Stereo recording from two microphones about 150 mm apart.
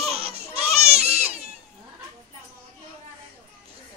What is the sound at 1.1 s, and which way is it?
Baby cry, 10° right (ahead or behind).